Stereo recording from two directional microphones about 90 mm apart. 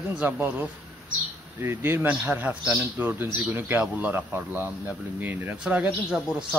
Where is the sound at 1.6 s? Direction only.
25° right (ahead or behind).